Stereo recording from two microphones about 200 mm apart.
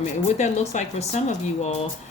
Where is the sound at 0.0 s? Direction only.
35° left (ahead or behind).